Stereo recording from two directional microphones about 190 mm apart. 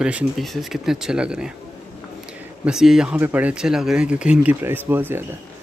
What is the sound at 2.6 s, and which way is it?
Speech, 5° right (ahead or behind).